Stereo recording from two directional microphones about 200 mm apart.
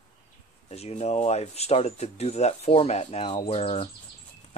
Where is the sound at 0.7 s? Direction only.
35° left (ahead or behind).